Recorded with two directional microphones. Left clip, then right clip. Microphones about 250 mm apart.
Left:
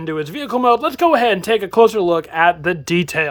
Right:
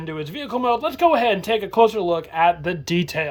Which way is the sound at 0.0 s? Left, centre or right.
Centre.